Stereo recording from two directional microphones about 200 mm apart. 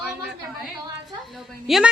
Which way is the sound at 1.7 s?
Centre (ahead or behind).